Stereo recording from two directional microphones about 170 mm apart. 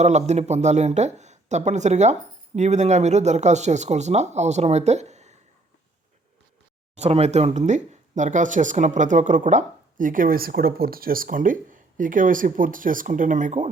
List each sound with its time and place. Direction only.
0.0 s speech: 40° right (ahead or behind)
7.0 s speech: 40° right (ahead or behind)